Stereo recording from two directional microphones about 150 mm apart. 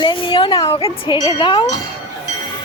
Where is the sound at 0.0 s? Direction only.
35° left (ahead or behind).